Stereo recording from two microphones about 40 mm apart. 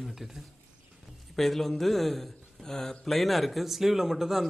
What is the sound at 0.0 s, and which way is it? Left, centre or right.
Speech, centre.